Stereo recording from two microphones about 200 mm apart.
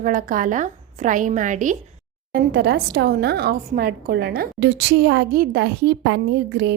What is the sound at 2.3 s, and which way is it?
A woman's voice, 55° right (ahead or behind).